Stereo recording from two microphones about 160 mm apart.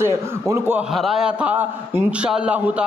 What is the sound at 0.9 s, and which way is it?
A man's voice, centre (ahead or behind).